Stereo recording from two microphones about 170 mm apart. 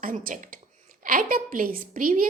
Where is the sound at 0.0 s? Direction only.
50° right (ahead or behind).